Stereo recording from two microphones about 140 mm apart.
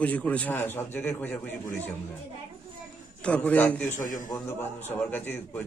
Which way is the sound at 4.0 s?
70° left (ahead or behind).